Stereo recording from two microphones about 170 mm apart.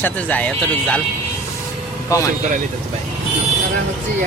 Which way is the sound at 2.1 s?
20° left (ahead or behind).